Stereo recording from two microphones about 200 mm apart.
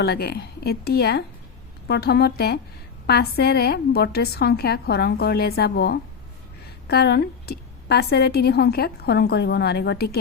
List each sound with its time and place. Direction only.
0.0 s a woman's voice: 50° left (ahead or behind)